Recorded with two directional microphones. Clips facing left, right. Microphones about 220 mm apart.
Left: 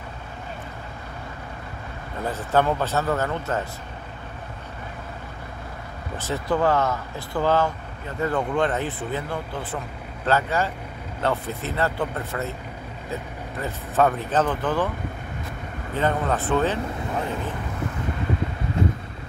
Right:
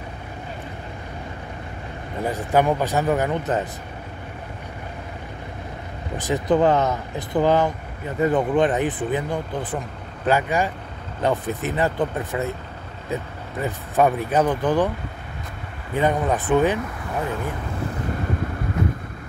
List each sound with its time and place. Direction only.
2.2 s speech: 15° right (ahead or behind)
6.1 s speech: 15° right (ahead or behind)
15.9 s speech: 15° right (ahead or behind)